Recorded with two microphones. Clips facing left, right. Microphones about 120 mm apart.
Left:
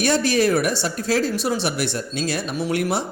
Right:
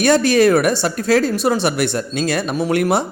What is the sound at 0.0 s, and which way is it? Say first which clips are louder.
Speech: right 6 dB; 55° right (ahead or behind).